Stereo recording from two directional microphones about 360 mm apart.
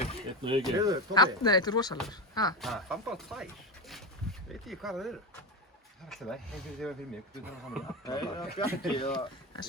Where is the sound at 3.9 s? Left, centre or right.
Centre.